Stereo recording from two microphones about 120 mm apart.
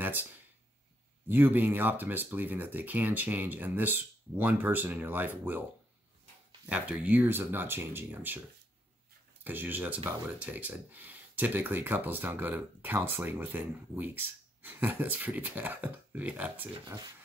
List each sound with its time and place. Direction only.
0.0 s a sound: 15° right (ahead or behind)
1.3 s speech: 15° right (ahead or behind)
6.7 s speech: 10° right (ahead or behind)
9.4 s speech: 15° right (ahead or behind)
16.8 s speech: 35° right (ahead or behind)